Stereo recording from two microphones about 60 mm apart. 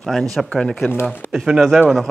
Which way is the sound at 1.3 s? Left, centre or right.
Centre.